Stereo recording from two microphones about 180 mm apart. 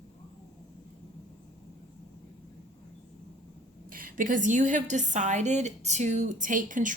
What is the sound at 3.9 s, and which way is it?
A woman's voice, 50° right (ahead or behind).